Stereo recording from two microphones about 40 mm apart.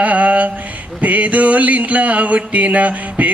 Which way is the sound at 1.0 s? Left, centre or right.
Right.